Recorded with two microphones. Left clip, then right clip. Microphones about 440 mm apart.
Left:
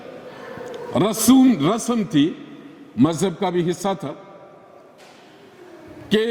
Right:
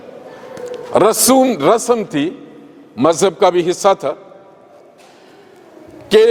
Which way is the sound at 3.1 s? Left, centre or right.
Right.